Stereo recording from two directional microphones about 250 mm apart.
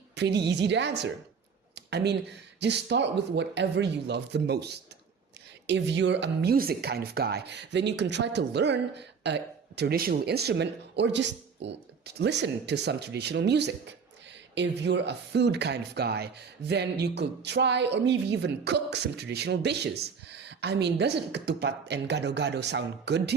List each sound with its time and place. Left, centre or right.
0.2 s speech: right
1.7 s a sound: right
2.6 s speech: right